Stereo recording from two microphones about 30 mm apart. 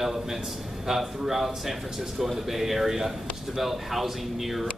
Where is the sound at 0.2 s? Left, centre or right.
Centre.